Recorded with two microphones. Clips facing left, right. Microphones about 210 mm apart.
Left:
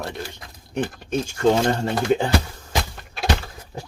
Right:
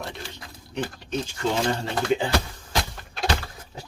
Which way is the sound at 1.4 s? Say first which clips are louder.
Left 7 dB; 45° left (ahead or behind).